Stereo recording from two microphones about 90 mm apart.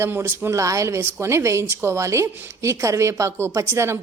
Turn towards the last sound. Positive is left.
turn(degrees=-30)  # may be behind; listen again after turning